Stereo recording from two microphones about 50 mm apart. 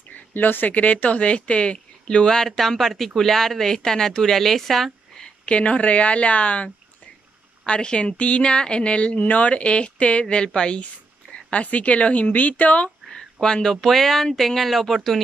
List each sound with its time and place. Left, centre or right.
0.3 s a woman's voice: left; by 5.3 s centre
5.4 s a woman's voice: left
13.1 s speech: centre